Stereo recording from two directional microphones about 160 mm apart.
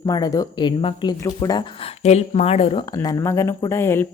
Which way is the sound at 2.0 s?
45° left (ahead or behind).